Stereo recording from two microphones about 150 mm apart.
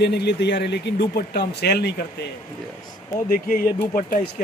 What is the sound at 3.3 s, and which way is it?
Speech, 75° left (ahead or behind).